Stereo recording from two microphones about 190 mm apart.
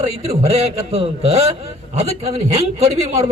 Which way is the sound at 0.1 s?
35° right (ahead or behind).